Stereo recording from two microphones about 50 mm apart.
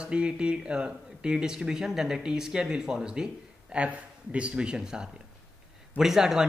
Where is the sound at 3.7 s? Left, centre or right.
Right.